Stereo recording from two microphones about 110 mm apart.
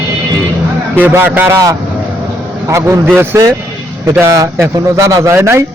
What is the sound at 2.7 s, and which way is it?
Speech, 25° right (ahead or behind).